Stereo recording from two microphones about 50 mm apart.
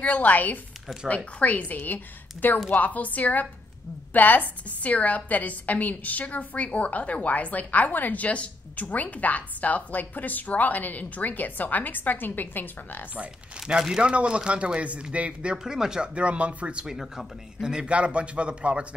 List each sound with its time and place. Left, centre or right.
0.0 s a woman's voice: left
13.6 s a man's voice: centre
15.5 s speech: centre
16.2 s a man's voice: right
16.8 s speech: centre
17.6 s a man's voice: centre